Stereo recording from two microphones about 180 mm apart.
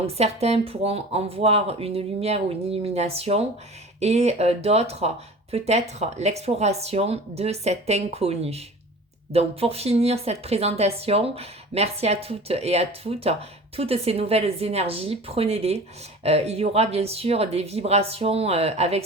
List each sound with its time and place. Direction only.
0.0 s a woman's voice: 35° right (ahead or behind)